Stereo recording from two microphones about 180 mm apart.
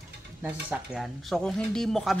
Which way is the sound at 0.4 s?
10° right (ahead or behind).